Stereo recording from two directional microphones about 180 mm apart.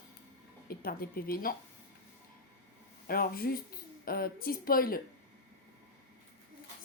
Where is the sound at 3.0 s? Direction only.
55° left (ahead or behind).